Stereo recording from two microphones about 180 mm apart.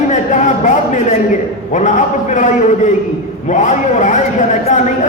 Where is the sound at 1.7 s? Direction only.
40° left (ahead or behind).